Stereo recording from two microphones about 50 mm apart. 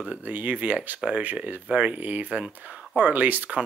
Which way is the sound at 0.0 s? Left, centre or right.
Right.